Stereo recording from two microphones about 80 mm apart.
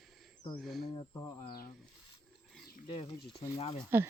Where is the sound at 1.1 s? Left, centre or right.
Left.